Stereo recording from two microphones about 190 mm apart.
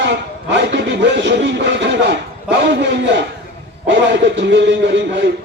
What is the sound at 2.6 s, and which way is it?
A man's voice, 65° right (ahead or behind).